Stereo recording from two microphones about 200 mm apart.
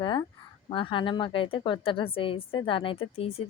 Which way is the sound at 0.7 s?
25° left (ahead or behind).